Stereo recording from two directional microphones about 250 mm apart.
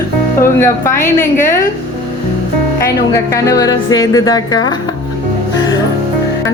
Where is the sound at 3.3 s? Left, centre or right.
Centre.